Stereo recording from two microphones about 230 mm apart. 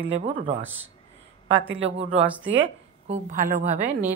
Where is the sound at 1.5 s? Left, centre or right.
Right.